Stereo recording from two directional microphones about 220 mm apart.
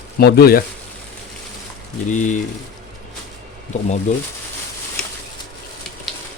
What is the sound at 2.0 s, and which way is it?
Speech, 35° left (ahead or behind).